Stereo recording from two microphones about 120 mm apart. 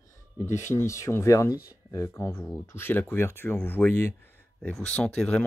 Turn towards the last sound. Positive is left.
turn(degrees=10)  # may be behind; listen again after turning